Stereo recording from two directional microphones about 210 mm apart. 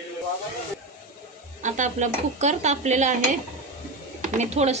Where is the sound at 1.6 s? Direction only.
35° right (ahead or behind).